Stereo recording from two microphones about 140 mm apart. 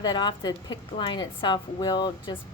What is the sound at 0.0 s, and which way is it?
A woman's voice, 30° left (ahead or behind).